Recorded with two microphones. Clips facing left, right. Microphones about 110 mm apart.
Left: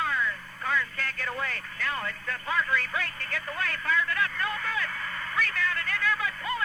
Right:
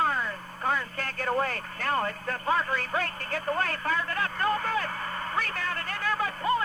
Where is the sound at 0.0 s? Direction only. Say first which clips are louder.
Right 2 dB; 40° right (ahead or behind).